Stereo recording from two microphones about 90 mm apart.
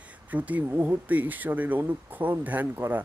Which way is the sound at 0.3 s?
20° right (ahead or behind).